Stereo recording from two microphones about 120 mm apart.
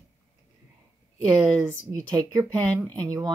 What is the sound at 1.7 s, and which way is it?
Speech, 30° right (ahead or behind).